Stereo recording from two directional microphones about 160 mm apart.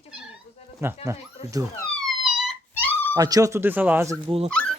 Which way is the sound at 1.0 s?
40° left (ahead or behind).